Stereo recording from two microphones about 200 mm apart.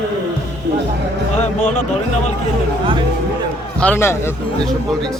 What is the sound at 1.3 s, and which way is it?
Speech, 35° left (ahead or behind).